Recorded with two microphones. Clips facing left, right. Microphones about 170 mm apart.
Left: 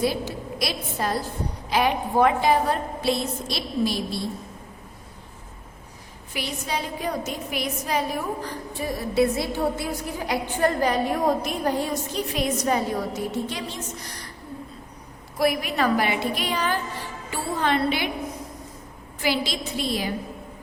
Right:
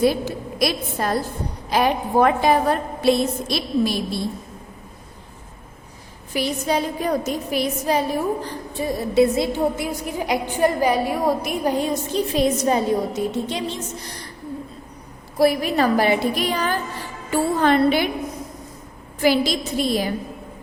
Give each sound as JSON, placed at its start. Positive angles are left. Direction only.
{"t": 0.0, "sound": "a woman's voice", "side_deg": -55}
{"t": 6.3, "sound": "a woman's voice", "side_deg": -40}
{"t": 11.9, "sound": "a woman's voice", "side_deg": -30}
{"t": 15.4, "sound": "a woman's voice", "side_deg": -35}
{"t": 17.3, "sound": "music", "side_deg": -45}
{"t": 19.2, "sound": "a woman's voice", "side_deg": -45}